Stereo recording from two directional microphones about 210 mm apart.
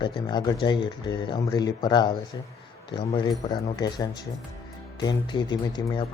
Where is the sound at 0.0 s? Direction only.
20° left (ahead or behind).